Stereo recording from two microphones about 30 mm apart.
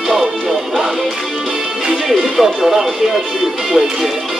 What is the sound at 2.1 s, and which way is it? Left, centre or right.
Music, centre.